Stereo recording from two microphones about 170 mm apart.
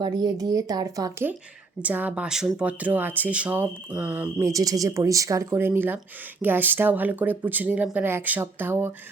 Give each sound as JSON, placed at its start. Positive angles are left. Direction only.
{"t": 0.0, "sound": "speech", "side_deg": -25}